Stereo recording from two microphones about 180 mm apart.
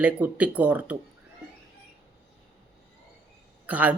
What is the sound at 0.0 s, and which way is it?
Speech, 10° right (ahead or behind).